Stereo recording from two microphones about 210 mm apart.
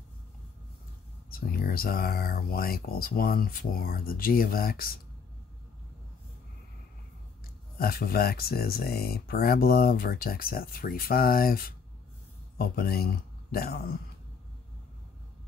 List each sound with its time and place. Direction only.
1.3 s speech: 45° left (ahead or behind)
7.7 s speech: 45° left (ahead or behind)